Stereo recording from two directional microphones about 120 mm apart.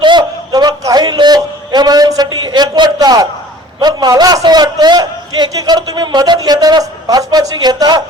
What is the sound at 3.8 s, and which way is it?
A man's voice, 35° right (ahead or behind).